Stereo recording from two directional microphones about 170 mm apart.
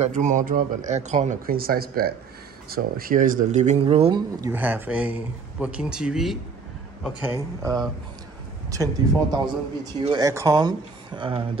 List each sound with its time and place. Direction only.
0.0 s speech: 45° right (ahead or behind)
4.4 s speech: 10° right (ahead or behind); by 11.4 s 30° right (ahead or behind)